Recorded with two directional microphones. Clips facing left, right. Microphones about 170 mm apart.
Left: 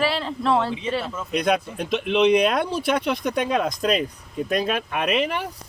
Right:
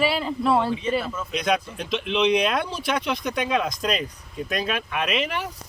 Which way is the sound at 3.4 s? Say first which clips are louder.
Left 1 dB; 40° left (ahead or behind).